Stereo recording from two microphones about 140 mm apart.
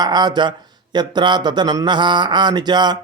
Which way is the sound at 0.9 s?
30° right (ahead or behind).